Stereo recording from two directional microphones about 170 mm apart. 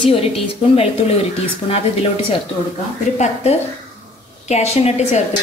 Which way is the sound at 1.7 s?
35° left (ahead or behind).